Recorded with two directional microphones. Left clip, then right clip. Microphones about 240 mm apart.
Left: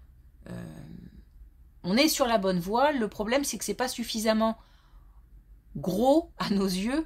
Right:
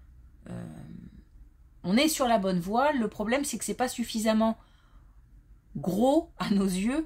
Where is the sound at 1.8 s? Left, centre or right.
Left.